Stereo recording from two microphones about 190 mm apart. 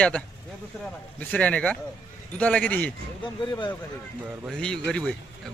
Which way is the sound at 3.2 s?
25° left (ahead or behind).